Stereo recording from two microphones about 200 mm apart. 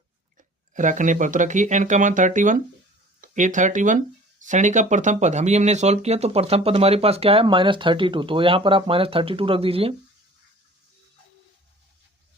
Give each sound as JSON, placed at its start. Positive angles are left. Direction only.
{"t": 0.7, "sound": "speech", "side_deg": -40}